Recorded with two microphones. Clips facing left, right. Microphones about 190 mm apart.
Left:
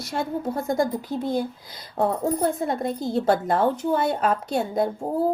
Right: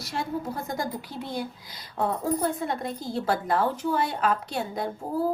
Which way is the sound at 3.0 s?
25° left (ahead or behind).